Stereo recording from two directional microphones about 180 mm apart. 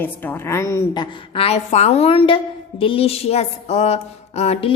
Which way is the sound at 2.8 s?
30° left (ahead or behind).